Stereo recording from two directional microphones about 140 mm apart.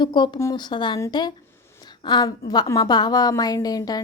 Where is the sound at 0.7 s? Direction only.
35° left (ahead or behind).